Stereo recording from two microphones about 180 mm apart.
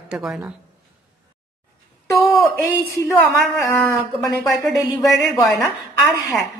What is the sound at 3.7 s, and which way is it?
A woman's voice, centre (ahead or behind).